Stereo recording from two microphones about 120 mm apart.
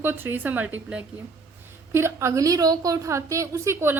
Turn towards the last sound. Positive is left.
turn(degrees=-25)  # may be behind; listen again after turning